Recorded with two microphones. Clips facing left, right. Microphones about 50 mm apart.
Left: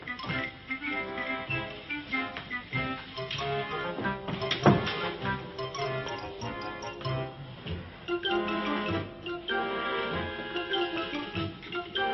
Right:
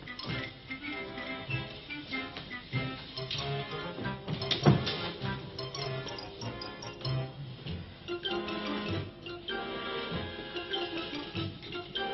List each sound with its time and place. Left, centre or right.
0.2 s music: left
10.0 s music: left